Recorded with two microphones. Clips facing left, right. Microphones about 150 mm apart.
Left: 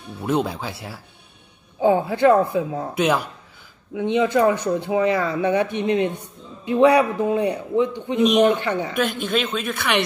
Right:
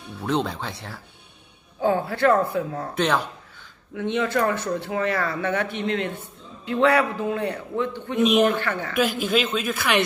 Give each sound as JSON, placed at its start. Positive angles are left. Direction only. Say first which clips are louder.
{"t": 0.2, "sound": "speech", "louder": "left 3 dB", "side_deg": 5}
{"t": 8.2, "sound": "speech", "louder": "left 2 dB", "side_deg": 0}
{"t": 8.5, "sound": "speech", "louder": "left 4 dB", "side_deg": 20}
{"t": 8.9, "sound": "speech", "louder": "even", "side_deg": -5}